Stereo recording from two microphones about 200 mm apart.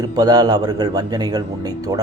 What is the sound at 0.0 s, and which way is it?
Speech, 20° right (ahead or behind).